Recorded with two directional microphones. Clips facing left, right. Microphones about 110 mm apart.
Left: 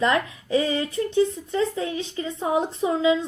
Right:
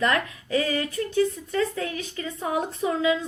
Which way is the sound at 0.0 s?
20° left (ahead or behind).